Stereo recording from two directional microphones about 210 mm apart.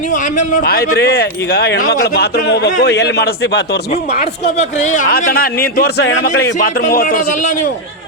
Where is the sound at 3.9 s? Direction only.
35° left (ahead or behind); by 6.5 s 55° left (ahead or behind).